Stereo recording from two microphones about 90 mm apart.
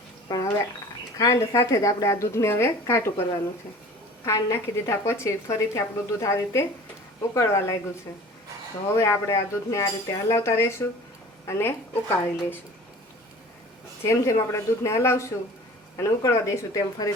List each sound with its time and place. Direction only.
0.3 s dishes: 45° left (ahead or behind)
1.2 s a woman's voice: 35° left (ahead or behind)
4.3 s a woman's voice: 35° left (ahead or behind)
9.0 s a woman's voice: 40° left (ahead or behind)
14.0 s a woman's voice: 35° left (ahead or behind)